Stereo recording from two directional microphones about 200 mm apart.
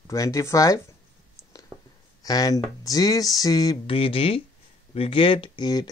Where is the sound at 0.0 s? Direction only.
15° left (ahead or behind).